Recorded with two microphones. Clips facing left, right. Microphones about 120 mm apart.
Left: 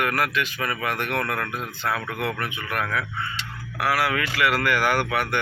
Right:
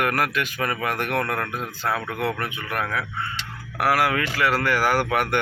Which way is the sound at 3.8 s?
45° right (ahead or behind).